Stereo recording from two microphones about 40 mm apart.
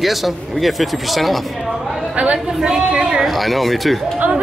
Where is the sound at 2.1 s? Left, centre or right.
Right.